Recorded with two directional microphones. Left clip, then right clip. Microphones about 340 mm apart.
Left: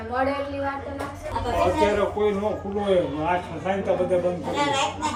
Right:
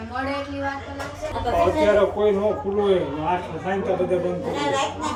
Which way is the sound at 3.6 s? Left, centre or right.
Centre.